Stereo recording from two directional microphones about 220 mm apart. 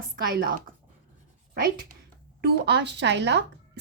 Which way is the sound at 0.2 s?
40° right (ahead or behind).